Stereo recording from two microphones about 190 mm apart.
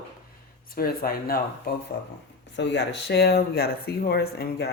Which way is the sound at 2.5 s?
65° left (ahead or behind).